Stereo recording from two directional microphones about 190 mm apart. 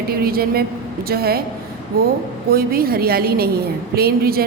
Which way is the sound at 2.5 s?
50° right (ahead or behind).